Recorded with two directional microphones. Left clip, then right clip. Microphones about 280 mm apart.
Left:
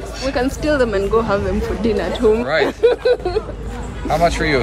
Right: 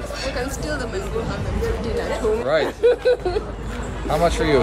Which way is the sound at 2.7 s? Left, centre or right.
Left.